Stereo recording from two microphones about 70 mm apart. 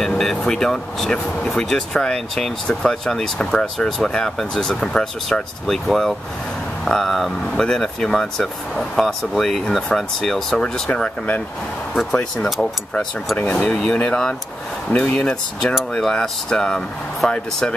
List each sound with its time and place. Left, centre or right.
0.0 s speech: centre
11.9 s speech: centre
13.4 s speech: centre